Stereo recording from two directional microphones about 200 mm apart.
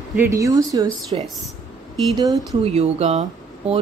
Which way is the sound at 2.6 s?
35° right (ahead or behind).